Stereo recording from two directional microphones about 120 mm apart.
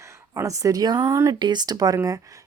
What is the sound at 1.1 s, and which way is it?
Speech, 25° right (ahead or behind).